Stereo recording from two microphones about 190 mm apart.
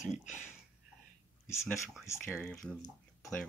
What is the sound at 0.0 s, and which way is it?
Speech, 40° left (ahead or behind).